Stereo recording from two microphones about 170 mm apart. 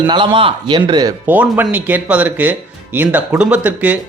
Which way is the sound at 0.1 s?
25° right (ahead or behind).